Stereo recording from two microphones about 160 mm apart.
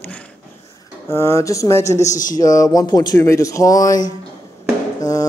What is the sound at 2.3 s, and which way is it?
Speech, 20° left (ahead or behind).